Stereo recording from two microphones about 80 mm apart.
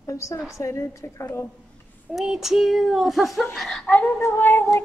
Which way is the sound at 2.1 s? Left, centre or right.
Centre.